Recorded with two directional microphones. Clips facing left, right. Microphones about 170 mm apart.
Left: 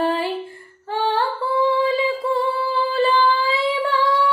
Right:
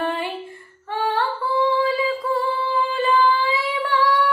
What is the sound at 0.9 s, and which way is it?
Female singing, 30° left (ahead or behind).